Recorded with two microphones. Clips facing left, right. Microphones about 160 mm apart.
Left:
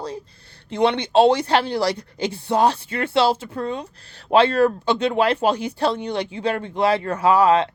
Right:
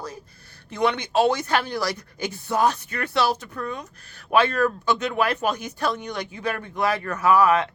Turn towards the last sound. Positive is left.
turn(degrees=30)  # may be behind; listen again after turning